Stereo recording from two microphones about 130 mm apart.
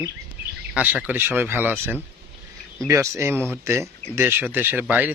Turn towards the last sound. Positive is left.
turn(degrees=-15)  # may be behind; listen again after turning